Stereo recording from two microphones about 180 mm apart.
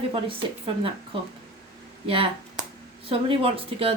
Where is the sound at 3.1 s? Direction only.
30° right (ahead or behind).